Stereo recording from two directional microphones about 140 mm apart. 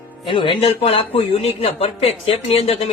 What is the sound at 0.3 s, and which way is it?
A man's voice, 35° left (ahead or behind).